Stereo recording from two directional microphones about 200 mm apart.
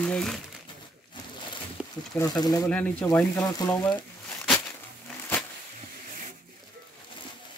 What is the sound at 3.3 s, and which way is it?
Speech, 20° left (ahead or behind).